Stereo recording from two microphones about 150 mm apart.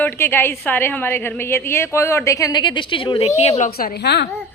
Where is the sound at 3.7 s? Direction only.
80° left.